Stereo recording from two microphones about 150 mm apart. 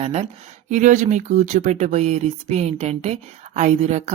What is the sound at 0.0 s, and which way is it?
Speech, 50° right (ahead or behind).